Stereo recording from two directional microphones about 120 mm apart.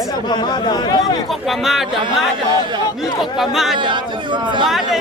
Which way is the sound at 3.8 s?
40° right (ahead or behind).